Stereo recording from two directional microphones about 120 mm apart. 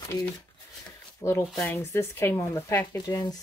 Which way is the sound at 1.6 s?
20° left (ahead or behind).